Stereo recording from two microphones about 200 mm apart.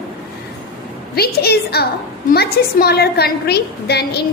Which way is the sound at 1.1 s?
50° left (ahead or behind).